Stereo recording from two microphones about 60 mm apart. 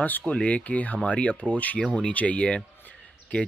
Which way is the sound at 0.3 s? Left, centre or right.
Centre.